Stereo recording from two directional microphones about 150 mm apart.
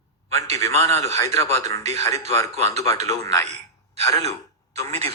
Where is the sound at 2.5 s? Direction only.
45° right (ahead or behind).